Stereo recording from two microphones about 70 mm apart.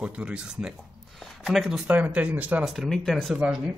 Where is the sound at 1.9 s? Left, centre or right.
Right.